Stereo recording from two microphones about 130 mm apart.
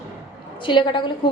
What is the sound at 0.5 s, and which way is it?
Speech, 40° left (ahead or behind).